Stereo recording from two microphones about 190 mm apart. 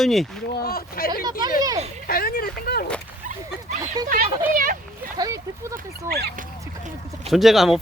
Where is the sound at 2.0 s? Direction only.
50° left (ahead or behind).